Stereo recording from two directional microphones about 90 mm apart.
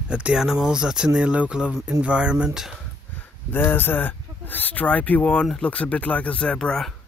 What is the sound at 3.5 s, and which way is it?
Speech, 25° left (ahead or behind).